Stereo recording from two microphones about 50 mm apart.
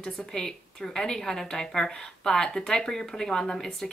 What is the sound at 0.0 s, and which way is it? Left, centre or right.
A woman's voice, centre.